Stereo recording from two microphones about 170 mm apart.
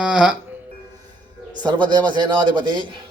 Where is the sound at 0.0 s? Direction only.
5° right (ahead or behind).